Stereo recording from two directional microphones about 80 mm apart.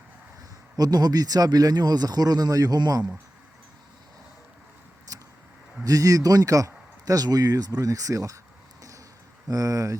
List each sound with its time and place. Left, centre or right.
0.8 s speech: right
5.1 s vehicle: right
5.8 s speech: right
9.5 s speech: right